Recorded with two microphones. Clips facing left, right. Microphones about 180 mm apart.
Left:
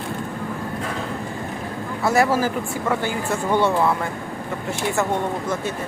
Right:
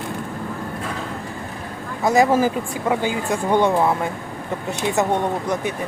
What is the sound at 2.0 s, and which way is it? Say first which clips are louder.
Speech: right 3 dB; 20° right (ahead or behind).